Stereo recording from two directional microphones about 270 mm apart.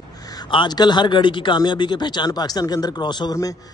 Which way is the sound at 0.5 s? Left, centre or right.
Centre.